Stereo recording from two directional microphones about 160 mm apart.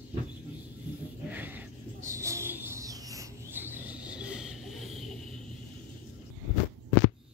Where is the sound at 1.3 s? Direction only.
10° right (ahead or behind).